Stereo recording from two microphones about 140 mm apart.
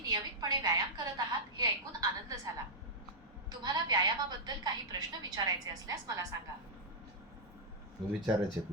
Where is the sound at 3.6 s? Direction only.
30° right (ahead or behind).